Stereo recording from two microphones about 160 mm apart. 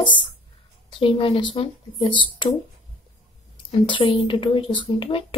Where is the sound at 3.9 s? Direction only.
35° left (ahead or behind).